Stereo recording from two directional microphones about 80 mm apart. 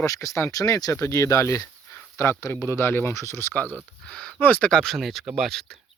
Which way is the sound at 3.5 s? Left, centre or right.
Centre.